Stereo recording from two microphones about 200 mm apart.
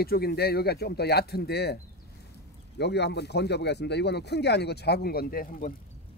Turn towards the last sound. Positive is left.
turn(degrees=45)  # may be behind; listen again after turning